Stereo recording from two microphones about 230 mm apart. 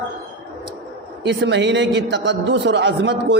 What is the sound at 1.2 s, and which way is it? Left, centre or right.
A man's voice, right.